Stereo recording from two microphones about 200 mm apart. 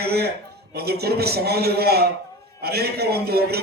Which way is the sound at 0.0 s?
50° right (ahead or behind).